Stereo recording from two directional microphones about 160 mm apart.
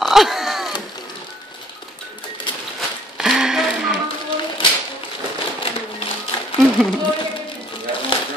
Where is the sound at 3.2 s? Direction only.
5° right (ahead or behind).